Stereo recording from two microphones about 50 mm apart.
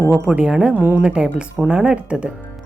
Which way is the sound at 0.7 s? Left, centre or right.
Right.